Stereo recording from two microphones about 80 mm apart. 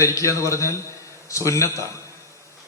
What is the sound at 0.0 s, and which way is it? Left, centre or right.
A man's voice, left.